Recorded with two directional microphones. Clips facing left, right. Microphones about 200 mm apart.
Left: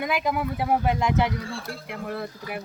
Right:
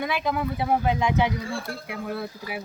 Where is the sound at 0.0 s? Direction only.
5° left (ahead or behind).